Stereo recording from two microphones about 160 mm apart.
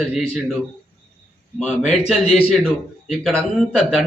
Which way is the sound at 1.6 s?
Centre (ahead or behind).